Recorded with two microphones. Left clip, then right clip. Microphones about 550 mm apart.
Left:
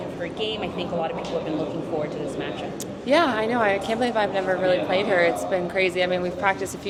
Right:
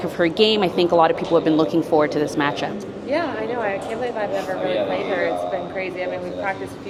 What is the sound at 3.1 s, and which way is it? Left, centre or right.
A woman's voice, left.